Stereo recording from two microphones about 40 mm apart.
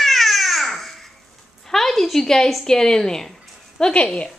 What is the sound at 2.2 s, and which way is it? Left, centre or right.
A woman's voice, centre.